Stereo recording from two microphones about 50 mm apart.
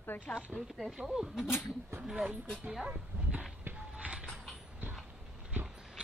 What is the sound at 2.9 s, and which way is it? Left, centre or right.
Dog, right.